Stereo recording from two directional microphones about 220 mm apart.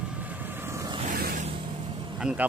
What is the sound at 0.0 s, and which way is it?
Vehicle, 5° right (ahead or behind).